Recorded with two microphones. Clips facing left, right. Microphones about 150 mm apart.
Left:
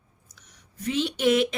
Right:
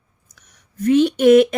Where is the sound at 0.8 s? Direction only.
50° right (ahead or behind).